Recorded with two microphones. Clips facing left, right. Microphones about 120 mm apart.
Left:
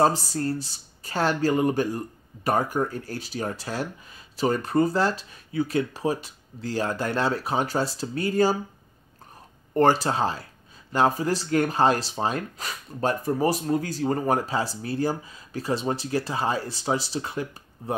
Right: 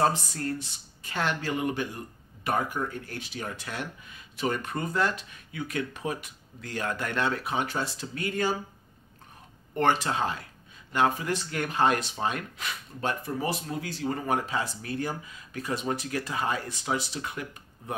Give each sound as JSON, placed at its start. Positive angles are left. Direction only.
{"t": 0.0, "sound": "speech", "side_deg": 35}
{"t": 9.8, "sound": "speech", "side_deg": 35}